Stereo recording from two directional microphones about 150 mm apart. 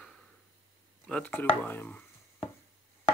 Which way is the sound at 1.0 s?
10° left (ahead or behind).